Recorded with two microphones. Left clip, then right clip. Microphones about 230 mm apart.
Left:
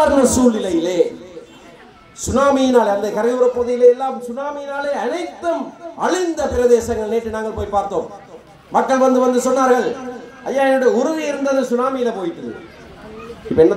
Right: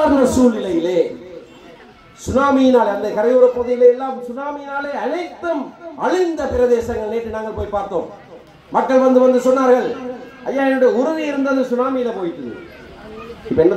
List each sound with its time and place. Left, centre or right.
0.1 s speech: left
2.2 s a man's voice: left